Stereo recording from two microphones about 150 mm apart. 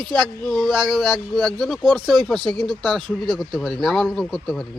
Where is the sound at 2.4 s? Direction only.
30° right (ahead or behind).